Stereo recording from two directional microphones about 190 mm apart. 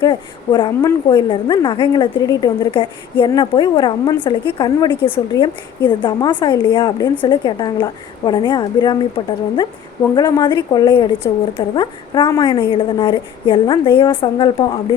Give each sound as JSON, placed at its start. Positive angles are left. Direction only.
{"t": 0.0, "sound": "a woman's voice", "side_deg": 20}